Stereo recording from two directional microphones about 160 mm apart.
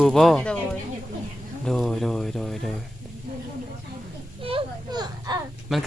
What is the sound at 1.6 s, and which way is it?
Speech, centre (ahead or behind).